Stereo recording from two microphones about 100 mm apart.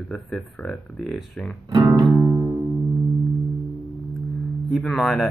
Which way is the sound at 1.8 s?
30° right (ahead or behind).